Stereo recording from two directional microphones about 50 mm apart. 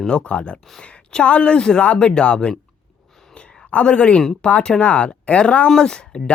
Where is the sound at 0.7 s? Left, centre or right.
Centre.